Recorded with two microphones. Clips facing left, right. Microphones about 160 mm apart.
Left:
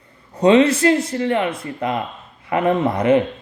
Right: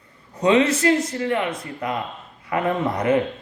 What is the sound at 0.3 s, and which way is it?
Speech, 30° left (ahead or behind).